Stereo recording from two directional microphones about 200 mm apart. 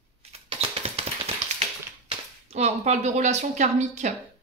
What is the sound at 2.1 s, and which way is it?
Speech, 30° right (ahead or behind).